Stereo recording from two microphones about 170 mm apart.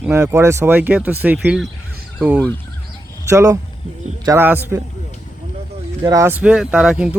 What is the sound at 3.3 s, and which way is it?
Speech, 20° right (ahead or behind).